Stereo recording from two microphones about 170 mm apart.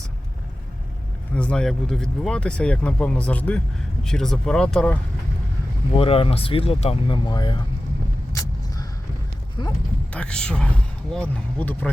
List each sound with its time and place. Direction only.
1.4 s speech: 5° left (ahead or behind)
5.9 s speech: 35° left (ahead or behind)
8.3 s vehicle: 20° left (ahead or behind)
9.6 s speech: 25° left (ahead or behind)
10.1 s speech: 5° left (ahead or behind)